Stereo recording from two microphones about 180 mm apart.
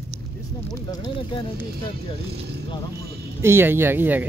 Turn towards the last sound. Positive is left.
turn(degrees=-10)  # may be behind; listen again after turning